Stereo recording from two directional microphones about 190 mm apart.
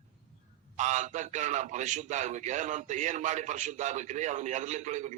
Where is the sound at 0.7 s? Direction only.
40° right (ahead or behind).